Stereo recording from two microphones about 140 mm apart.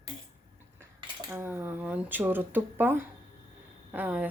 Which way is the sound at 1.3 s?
15° right (ahead or behind).